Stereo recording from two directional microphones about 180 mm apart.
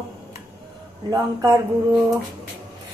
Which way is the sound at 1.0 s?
20° right (ahead or behind).